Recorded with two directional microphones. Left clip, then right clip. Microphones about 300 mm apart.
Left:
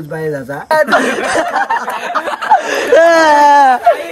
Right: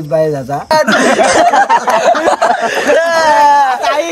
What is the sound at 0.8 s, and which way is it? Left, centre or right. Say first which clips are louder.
Speech: right 3 dB; centre.